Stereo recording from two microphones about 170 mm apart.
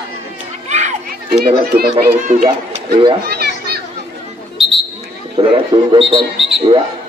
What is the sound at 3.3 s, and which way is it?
Children playing, 70° right (ahead or behind).